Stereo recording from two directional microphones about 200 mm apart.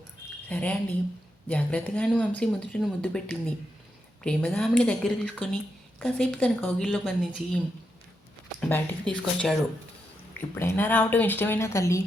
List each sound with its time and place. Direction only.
0.4 s speech: 5° left (ahead or behind)
8.7 s a woman's voice: 5° left (ahead or behind)